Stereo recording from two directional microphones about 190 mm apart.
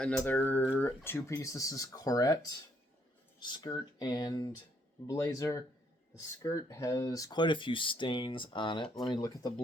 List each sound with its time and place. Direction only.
0.0 s speech: 10° left (ahead or behind)